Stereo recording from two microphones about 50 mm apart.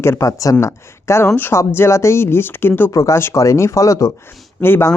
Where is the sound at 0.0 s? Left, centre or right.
Left.